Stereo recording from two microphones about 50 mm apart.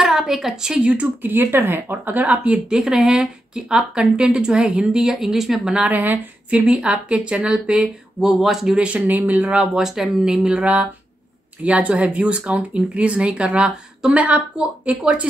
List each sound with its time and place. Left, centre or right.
0.0 s a woman's voice: centre
1.2 s speech: right
2.0 s speech: right
2.8 s a woman's voice: centre
5.1 s a woman's voice: centre
5.8 s speech: right
6.5 s a woman's voice: right; by 8.7 s centre
8.7 s speech: right
9.0 s speech: right
9.4 s speech: right
9.8 s a woman's voice: centre
10.6 s speech: right